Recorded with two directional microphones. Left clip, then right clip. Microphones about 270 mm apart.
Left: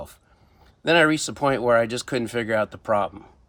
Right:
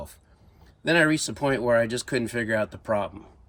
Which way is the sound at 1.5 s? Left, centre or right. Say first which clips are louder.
Left 3 dB; centre.